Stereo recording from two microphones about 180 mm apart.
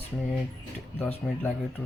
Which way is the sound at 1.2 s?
Centre (ahead or behind).